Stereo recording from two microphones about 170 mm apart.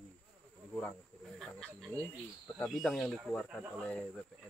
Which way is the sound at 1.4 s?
5° left (ahead or behind).